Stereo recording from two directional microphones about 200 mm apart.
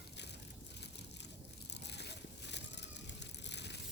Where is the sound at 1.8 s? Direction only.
55° left (ahead or behind).